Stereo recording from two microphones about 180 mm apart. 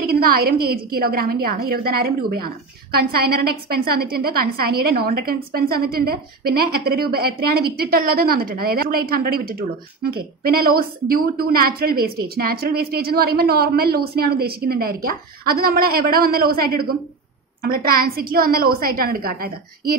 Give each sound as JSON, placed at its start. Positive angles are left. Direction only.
{"t": 0.0, "sound": "a woman's voice", "side_deg": -55}